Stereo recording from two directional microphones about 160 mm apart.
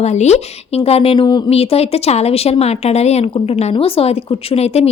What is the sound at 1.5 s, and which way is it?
Speech, 40° left (ahead or behind).